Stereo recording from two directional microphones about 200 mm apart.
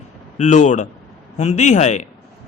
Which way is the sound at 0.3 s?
35° left (ahead or behind).